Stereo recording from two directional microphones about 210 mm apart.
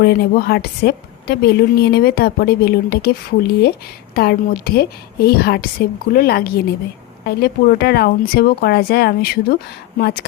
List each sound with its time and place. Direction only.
0.0 s a woman's voice: 50° left (ahead or behind)